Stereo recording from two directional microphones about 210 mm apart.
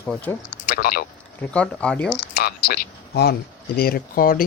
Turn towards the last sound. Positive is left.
turn(degrees=45)  # may be behind; listen again after turning